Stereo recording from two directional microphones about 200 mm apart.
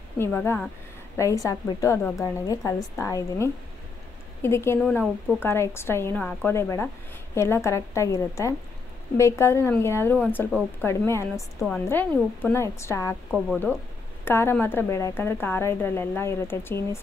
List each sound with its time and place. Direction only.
0.2 s a woman's voice: 10° left (ahead or behind)
14.2 s a woman's voice: 10° left (ahead or behind)